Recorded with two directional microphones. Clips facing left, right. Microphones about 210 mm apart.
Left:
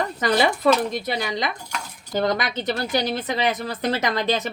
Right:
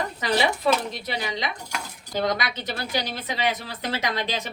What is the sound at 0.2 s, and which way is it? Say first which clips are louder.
A woman's voice: left 4 dB; 50° left (ahead or behind).